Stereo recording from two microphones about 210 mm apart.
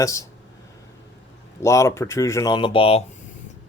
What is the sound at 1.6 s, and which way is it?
Speech, 15° left (ahead or behind).